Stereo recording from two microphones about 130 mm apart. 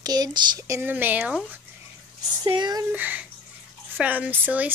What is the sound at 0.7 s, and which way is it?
Speech, 15° right (ahead or behind).